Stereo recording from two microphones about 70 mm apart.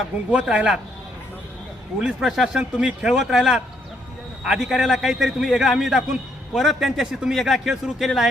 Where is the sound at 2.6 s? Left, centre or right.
Centre.